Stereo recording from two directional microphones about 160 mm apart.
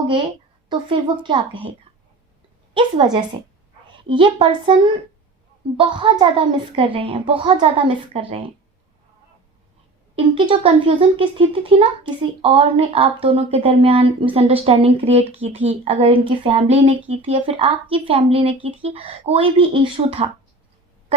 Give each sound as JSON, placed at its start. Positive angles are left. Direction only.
{"t": 0.7, "sound": "speech", "side_deg": -30}
{"t": 2.7, "sound": "a woman's voice", "side_deg": -25}
{"t": 10.2, "sound": "speech", "side_deg": -30}